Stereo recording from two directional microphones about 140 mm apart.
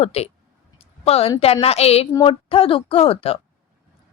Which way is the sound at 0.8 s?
45° left (ahead or behind).